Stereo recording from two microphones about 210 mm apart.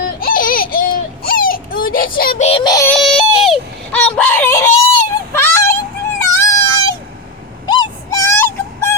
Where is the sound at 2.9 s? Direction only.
Centre (ahead or behind).